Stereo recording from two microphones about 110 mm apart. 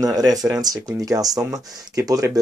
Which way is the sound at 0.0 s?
35° right (ahead or behind).